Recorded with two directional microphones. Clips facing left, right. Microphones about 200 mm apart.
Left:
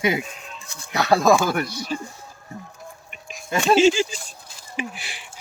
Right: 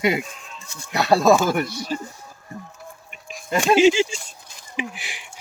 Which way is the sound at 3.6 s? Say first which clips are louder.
Right 1 dB; 15° right (ahead or behind).